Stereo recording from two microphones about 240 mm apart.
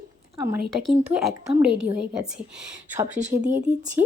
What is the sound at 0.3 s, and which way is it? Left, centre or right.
Speech, centre.